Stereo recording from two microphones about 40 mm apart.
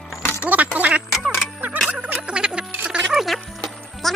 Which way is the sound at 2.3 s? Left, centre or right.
Right.